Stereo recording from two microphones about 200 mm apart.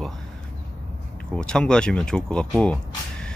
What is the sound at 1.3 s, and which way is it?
Speech, 5° left (ahead or behind).